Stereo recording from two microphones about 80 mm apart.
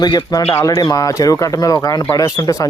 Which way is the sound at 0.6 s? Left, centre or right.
Left.